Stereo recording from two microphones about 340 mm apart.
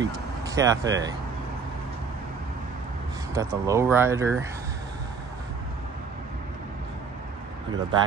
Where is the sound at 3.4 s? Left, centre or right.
Centre.